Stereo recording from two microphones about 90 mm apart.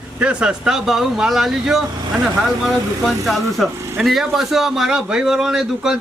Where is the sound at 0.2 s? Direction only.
10° right (ahead or behind).